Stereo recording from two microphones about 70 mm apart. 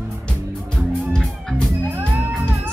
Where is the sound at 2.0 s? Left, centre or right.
Right.